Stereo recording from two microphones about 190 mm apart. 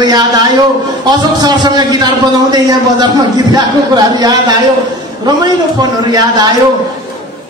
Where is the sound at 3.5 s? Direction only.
20° right (ahead or behind).